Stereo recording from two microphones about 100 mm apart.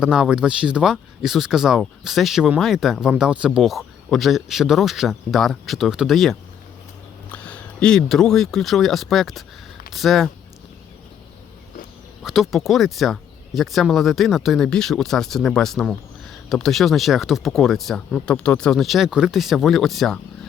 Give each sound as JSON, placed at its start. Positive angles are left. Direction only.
{"t": 0.0, "sound": "speech", "side_deg": -5}
{"t": 7.3, "sound": "speech", "side_deg": 15}
{"t": 12.2, "sound": "speech", "side_deg": -5}